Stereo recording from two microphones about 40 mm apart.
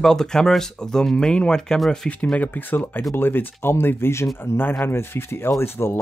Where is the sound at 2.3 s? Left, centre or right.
Left.